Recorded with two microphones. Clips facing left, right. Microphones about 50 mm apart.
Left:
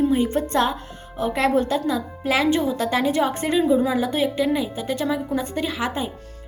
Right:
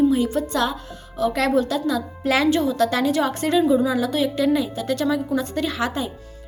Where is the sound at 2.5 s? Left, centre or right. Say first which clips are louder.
Right 2 dB; left.